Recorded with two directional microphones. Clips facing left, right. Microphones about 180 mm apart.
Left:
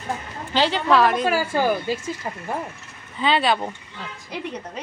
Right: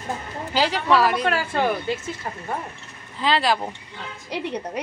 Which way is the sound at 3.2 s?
Centre (ahead or behind).